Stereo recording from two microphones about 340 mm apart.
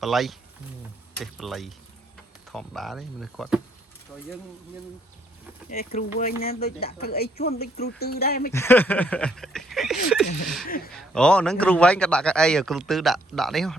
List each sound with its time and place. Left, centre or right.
0.0 s a man's voice: centre
5.7 s speech: left
8.5 s a man's voice: centre